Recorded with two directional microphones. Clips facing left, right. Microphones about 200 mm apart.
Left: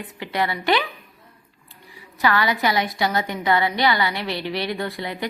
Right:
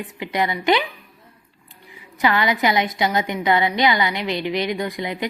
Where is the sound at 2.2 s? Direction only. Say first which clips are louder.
Right 2 dB; 20° right (ahead or behind).